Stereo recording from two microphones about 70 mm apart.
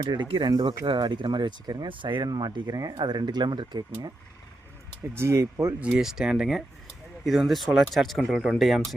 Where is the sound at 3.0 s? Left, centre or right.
Right.